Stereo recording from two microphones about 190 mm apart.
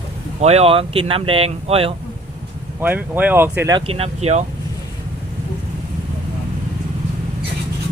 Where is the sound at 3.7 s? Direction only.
30° right (ahead or behind).